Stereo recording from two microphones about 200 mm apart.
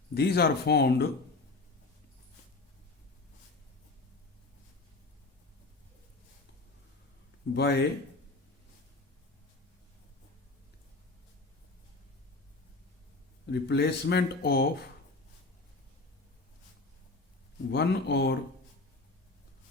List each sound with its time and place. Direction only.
0.1 s speech: 55° left (ahead or behind)
7.5 s speech: 55° left (ahead or behind)
13.5 s speech: 60° left (ahead or behind)
17.7 s speech: 55° left (ahead or behind)